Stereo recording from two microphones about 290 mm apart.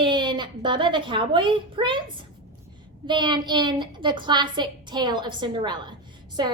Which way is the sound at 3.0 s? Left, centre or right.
Centre.